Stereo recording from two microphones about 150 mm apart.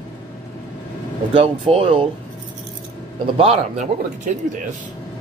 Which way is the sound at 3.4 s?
50° right (ahead or behind).